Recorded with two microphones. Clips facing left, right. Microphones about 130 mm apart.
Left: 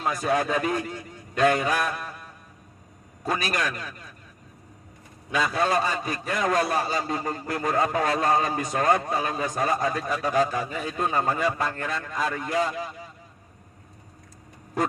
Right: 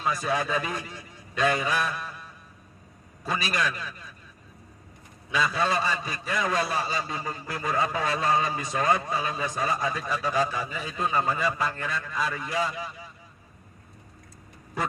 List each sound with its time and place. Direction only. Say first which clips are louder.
0.0 s a man's voice: left 3 dB; 50° left (ahead or behind)
5.3 s a man's voice: left 2 dB; 50° left (ahead or behind)